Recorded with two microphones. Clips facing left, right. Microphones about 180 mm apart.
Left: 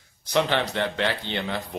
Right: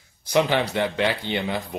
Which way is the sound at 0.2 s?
10° right (ahead or behind).